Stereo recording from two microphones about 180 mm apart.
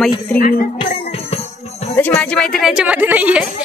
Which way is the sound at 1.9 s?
10° left (ahead or behind).